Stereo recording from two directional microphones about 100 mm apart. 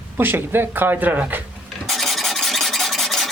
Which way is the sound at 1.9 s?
Centre (ahead or behind).